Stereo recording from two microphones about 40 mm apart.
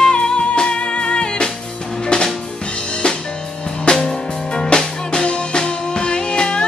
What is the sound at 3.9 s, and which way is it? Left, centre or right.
Music, left.